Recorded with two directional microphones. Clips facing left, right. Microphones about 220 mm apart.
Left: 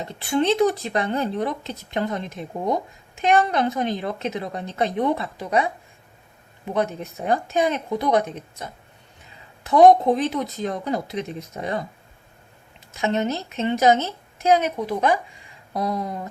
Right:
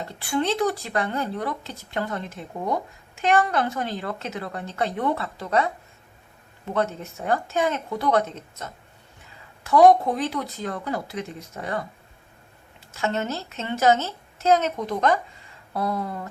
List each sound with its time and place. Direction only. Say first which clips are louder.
0.0 s a woman's voice: left 3 dB; 20° left (ahead or behind)
12.9 s a woman's voice: left 4 dB; 15° left (ahead or behind)